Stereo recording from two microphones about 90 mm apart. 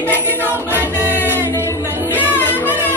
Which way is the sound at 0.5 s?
25° right (ahead or behind).